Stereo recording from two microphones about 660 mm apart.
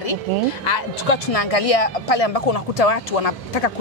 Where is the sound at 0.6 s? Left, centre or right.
Left.